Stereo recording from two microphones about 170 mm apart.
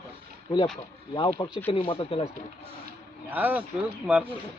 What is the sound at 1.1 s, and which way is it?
Speech, 25° left (ahead or behind).